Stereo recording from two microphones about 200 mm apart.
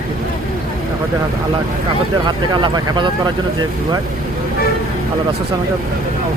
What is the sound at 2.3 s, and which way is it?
Speech, 20° right (ahead or behind).